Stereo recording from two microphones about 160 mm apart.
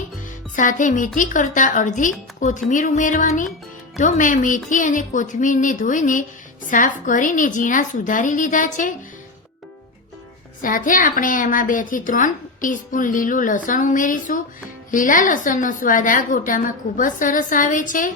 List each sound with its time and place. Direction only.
0.5 s a woman's voice: 55° left (ahead or behind)
10.6 s a woman's voice: 55° left (ahead or behind)